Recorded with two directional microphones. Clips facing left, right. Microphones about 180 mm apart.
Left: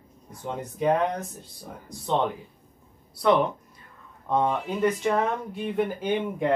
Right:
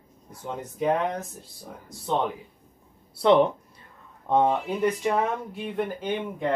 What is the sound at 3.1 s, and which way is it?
Speech, 25° right (ahead or behind).